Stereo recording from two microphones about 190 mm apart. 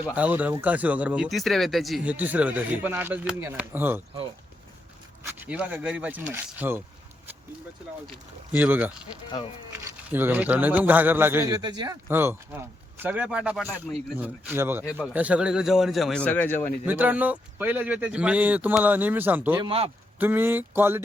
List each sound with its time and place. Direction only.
0.1 s speech: 10° right (ahead or behind)
5.4 s speech: 5° right (ahead or behind)
8.5 s speech: 10° right (ahead or behind)
10.1 s speech: 10° right (ahead or behind); by 16.6 s 10° left (ahead or behind)
16.8 s speech: 10° right (ahead or behind)
19.5 s speech: 30° right (ahead or behind)
20.1 s speech: 10° right (ahead or behind)